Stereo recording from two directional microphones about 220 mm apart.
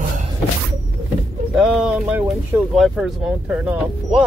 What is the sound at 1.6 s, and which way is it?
Speech, 5° right (ahead or behind).